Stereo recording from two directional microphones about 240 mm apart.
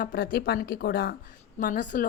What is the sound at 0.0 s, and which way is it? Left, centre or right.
A woman's voice, left.